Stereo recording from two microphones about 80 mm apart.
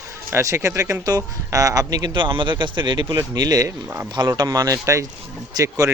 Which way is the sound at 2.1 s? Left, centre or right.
Right.